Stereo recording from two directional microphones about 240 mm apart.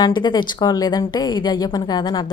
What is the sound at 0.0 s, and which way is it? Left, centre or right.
A woman's voice, centre.